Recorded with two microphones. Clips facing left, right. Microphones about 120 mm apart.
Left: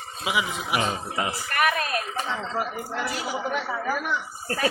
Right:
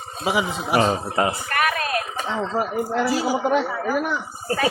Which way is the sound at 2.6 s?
35° right (ahead or behind).